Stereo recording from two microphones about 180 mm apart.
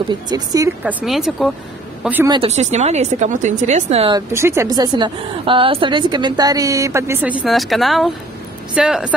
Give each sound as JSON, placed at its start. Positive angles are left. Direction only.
{"t": 0.1, "sound": "a woman's voice", "side_deg": -20}
{"t": 0.8, "sound": "speech", "side_deg": 0}
{"t": 2.2, "sound": "a woman's voice", "side_deg": -25}
{"t": 2.5, "sound": "a woman's voice", "side_deg": -40}
{"t": 4.1, "sound": "a woman's voice", "side_deg": -15}